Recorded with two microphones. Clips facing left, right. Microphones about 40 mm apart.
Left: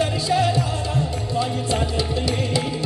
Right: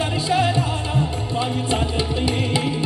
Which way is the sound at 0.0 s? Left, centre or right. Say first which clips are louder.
Even; right.